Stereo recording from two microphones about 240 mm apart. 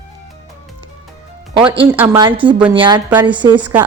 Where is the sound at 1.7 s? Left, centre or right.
Centre.